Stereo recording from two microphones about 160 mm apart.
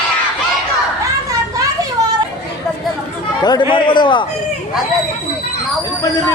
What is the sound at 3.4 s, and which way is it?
Speech, 25° left (ahead or behind).